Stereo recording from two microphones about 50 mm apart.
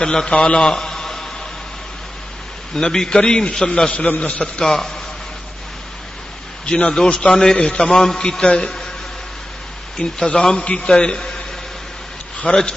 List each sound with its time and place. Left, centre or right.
0.0 s a man's voice: centre
0.6 s a sound: centre
2.7 s a man's voice: centre
3.9 s a man's voice: left
4.6 s a man's voice: centre
6.6 s a man's voice: centre
7.8 s a man's voice: centre
9.9 s a man's voice: centre